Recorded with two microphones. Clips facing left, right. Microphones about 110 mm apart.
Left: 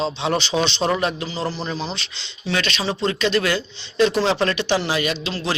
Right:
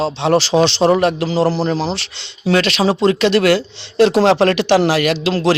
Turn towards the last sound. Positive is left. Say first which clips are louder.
# right 9 dB
turn(degrees=-90)